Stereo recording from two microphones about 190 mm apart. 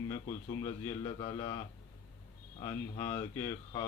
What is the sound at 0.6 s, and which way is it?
A man's voice, 20° left (ahead or behind).